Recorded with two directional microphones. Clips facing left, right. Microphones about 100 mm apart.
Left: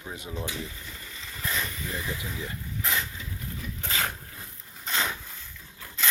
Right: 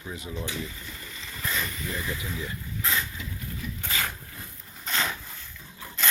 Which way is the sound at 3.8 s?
30° left (ahead or behind).